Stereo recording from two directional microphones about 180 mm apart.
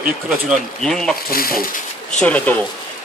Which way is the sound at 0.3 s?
Centre (ahead or behind).